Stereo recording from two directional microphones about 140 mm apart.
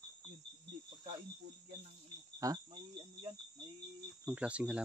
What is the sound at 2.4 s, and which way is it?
Cricket, 25° right (ahead or behind).